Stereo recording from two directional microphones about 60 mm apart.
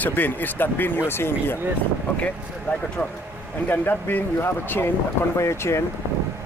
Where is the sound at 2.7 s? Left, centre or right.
Centre.